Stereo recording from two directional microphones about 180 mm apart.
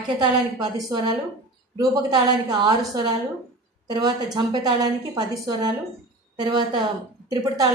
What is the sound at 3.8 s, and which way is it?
A woman's voice, 20° right (ahead or behind).